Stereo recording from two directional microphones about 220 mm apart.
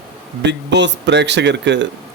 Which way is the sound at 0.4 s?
50° right (ahead or behind).